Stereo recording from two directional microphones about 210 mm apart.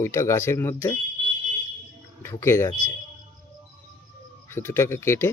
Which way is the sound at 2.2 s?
10° left (ahead or behind).